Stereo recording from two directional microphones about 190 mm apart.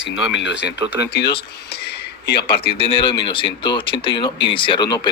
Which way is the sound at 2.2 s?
55° left (ahead or behind).